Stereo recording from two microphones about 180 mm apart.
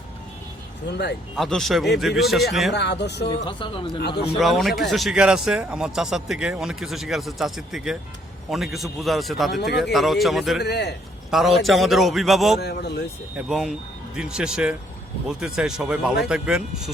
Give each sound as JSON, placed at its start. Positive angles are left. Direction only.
{"t": 0.9, "sound": "speech", "side_deg": 70}
{"t": 1.4, "sound": "speech", "side_deg": 0}
{"t": 2.7, "sound": "speech", "side_deg": 70}
{"t": 3.2, "sound": "speech", "side_deg": 30}
{"t": 4.4, "sound": "speech", "side_deg": 0}
{"t": 9.6, "sound": "speech", "side_deg": 65}
{"t": 9.8, "sound": "speech", "side_deg": 0}
{"t": 10.6, "sound": "speech", "side_deg": 65}
{"t": 11.3, "sound": "speech", "side_deg": 0}
{"t": 12.5, "sound": "speech", "side_deg": 65}
{"t": 13.3, "sound": "speech", "side_deg": -5}